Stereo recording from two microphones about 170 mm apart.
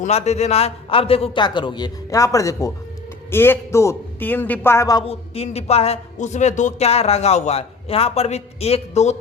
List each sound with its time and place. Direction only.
0.0 s a man's voice: 40° left (ahead or behind); by 5.0 s 20° left (ahead or behind)
5.0 s a woman's voice: 35° left (ahead or behind)